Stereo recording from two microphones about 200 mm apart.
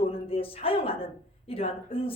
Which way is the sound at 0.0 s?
30° left (ahead or behind).